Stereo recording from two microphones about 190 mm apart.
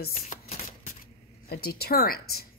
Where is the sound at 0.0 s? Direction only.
45° left (ahead or behind).